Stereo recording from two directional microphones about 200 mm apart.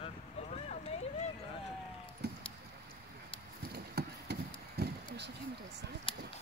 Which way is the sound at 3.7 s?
55° right (ahead or behind).